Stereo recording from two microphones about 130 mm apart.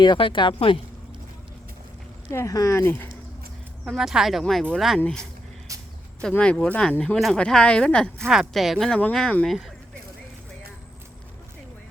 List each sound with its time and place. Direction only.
0.0 s speech: 40° left (ahead or behind)
2.3 s speech: 25° left (ahead or behind)
3.8 s speech: 5° right (ahead or behind)
6.2 s speech: 10° left (ahead or behind)